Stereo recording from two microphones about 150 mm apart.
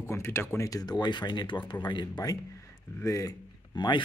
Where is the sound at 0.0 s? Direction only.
15° left (ahead or behind).